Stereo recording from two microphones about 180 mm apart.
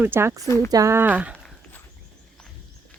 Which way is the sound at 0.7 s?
15° right (ahead or behind).